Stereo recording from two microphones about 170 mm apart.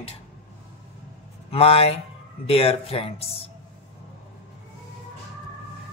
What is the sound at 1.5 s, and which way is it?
Speech, 35° left (ahead or behind).